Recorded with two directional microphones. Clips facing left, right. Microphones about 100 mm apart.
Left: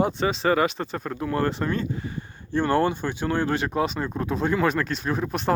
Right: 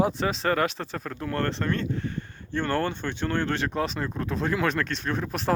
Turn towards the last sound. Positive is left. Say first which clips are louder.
# left 2 dB
turn(degrees=0)  # may be behind; listen again after turning